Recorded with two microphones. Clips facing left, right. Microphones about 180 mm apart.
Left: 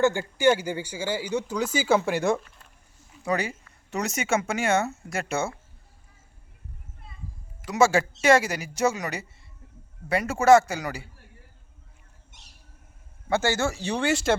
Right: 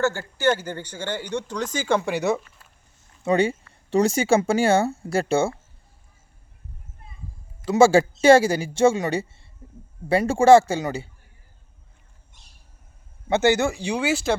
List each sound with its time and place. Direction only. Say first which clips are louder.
0.0 s speech: left 1 dB; 15° left (ahead or behind); by 2.4 s centre (ahead or behind)
3.2 s speech: right 7 dB; 25° right (ahead or behind)
7.6 s speech: right 6 dB; 30° right (ahead or behind)
13.2 s speech: right 5 dB; 20° right (ahead or behind); by 14.3 s centre (ahead or behind)